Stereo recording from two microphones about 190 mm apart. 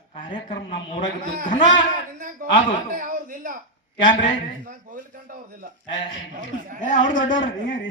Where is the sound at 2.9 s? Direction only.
45° right (ahead or behind).